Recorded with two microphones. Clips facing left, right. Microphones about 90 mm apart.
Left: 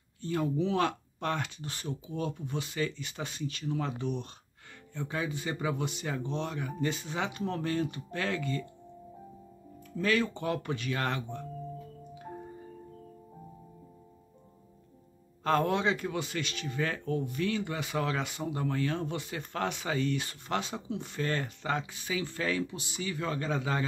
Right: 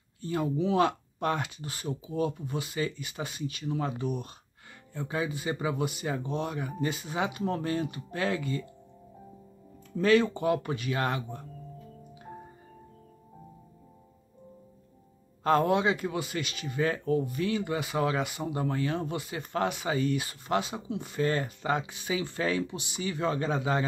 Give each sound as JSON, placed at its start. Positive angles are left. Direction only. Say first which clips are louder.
{"t": 0.2, "sound": "speech", "louder": "right 1 dB", "side_deg": -10}
{"t": 9.9, "sound": "speech", "louder": "right 6 dB", "side_deg": -25}
{"t": 10.3, "sound": "speech", "louder": "right 5 dB", "side_deg": -10}
{"t": 15.4, "sound": "speech", "louder": "right 3 dB", "side_deg": -10}